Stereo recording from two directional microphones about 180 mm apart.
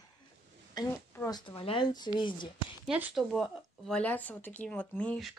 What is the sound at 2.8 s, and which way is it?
Speech, 5° right (ahead or behind).